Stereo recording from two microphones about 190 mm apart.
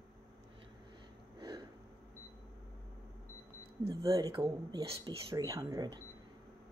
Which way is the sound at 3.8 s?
30° right (ahead or behind).